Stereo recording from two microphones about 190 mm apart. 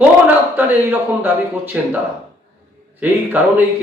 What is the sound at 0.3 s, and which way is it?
A man's voice, 10° right (ahead or behind).